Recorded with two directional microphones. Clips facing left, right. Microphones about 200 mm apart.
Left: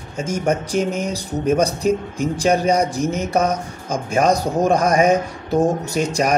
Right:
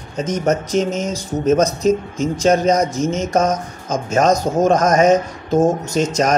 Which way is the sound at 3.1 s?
60° left (ahead or behind).